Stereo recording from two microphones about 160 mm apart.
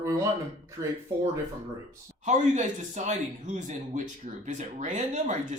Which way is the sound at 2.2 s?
50° right (ahead or behind).